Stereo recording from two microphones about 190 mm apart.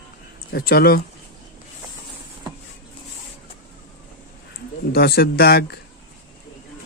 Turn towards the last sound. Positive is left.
turn(degrees=55)  # may be behind; listen again after turning